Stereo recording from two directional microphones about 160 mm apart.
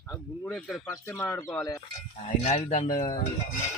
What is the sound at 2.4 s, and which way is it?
Speech, 45° left (ahead or behind).